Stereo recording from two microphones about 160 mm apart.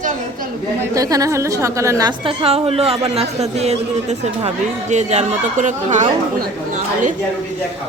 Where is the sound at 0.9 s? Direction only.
20° right (ahead or behind); by 6.1 s 50° right (ahead or behind).